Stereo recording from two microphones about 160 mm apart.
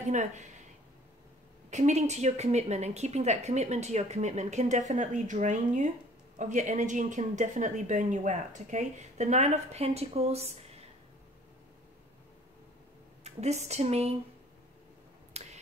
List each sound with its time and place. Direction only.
0.1 s a woman's voice: 50° right (ahead or behind)
1.7 s a woman's voice: 45° right (ahead or behind)
13.2 s speech: 45° right (ahead or behind)
15.3 s finger snapping: 40° right (ahead or behind)